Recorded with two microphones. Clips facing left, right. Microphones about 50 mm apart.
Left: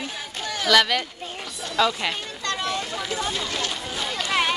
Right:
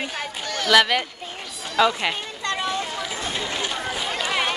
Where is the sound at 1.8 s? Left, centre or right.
Centre.